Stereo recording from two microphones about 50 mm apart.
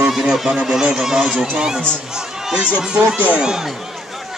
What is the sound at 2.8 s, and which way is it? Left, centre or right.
Speech, centre.